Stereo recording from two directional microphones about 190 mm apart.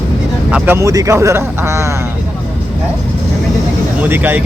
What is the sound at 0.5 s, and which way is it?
Speech, 10° right (ahead or behind).